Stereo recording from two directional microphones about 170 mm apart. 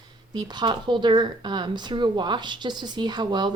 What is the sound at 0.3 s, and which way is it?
Speech, 25° right (ahead or behind).